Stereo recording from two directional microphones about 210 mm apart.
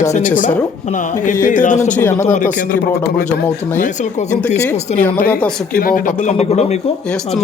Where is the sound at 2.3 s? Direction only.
40° left (ahead or behind).